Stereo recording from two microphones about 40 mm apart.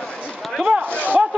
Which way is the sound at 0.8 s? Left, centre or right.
Left.